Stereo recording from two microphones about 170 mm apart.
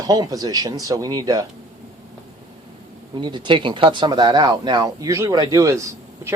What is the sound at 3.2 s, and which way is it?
Speech, 25° right (ahead or behind).